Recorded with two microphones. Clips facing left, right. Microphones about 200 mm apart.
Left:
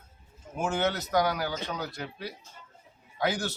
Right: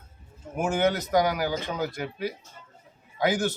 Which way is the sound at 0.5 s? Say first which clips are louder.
Right 4 dB; 15° right (ahead or behind).